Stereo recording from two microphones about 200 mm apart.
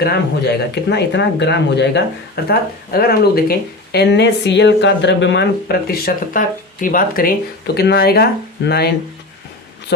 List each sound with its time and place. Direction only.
0.0 s speech: 55° left (ahead or behind)